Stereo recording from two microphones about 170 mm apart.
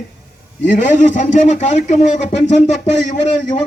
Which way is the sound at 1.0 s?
45° left (ahead or behind).